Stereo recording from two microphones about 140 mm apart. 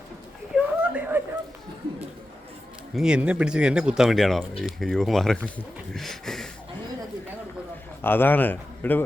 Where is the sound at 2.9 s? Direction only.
5° right (ahead or behind).